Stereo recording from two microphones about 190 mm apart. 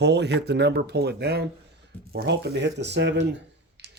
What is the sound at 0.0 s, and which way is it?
Speech, 60° right (ahead or behind).